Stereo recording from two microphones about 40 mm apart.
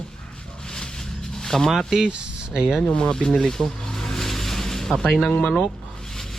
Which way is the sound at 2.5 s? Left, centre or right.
Centre.